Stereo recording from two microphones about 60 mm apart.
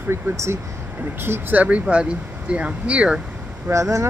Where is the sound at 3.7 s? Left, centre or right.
Right.